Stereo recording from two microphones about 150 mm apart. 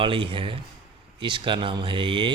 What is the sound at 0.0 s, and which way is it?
Speech, 35° right (ahead or behind).